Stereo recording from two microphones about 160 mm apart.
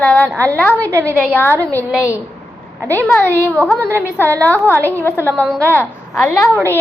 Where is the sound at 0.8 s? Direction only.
20° right (ahead or behind).